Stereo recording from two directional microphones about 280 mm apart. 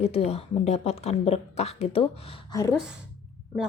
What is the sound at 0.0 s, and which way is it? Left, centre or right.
A woman's voice, left.